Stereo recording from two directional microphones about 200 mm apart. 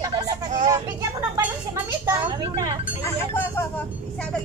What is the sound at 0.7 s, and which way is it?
Speech, 15° right (ahead or behind).